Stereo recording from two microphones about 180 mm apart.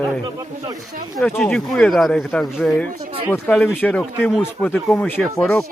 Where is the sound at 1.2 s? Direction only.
5° left (ahead or behind).